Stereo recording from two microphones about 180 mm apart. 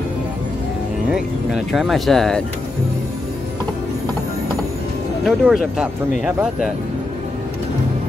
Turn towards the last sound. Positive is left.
turn(degrees=-5)  # may be behind; listen again after turning